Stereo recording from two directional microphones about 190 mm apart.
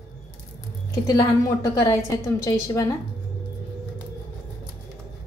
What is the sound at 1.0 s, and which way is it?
A woman's voice, 15° left (ahead or behind).